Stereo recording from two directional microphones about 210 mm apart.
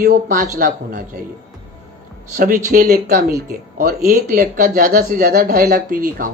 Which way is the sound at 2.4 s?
40° right (ahead or behind).